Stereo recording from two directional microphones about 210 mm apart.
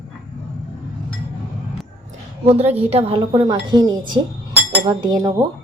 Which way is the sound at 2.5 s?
30° right (ahead or behind).